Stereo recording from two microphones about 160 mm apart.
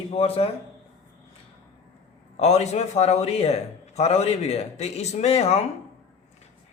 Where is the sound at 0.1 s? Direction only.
40° left (ahead or behind).